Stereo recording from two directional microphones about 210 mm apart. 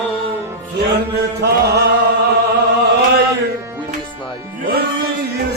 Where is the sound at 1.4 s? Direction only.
50° right (ahead or behind).